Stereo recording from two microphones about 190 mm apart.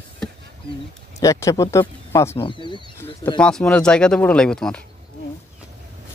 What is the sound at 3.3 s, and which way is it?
Speech, 5° left (ahead or behind).